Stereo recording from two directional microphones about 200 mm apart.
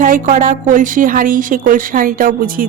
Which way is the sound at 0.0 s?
40° right (ahead or behind).